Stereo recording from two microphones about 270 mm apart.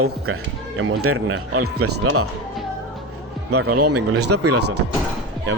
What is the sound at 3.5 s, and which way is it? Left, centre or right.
A man's voice, right.